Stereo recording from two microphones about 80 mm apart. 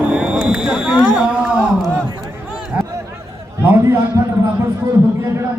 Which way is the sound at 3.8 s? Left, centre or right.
Right.